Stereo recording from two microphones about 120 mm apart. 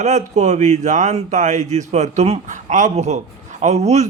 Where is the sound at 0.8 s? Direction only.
85° right.